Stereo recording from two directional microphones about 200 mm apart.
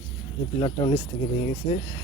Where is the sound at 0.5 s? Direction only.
25° left (ahead or behind).